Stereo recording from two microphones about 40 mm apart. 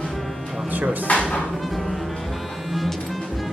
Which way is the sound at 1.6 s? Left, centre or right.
Centre.